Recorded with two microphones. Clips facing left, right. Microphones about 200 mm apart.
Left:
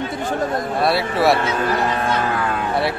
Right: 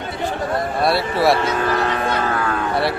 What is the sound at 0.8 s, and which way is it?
Speech, centre (ahead or behind).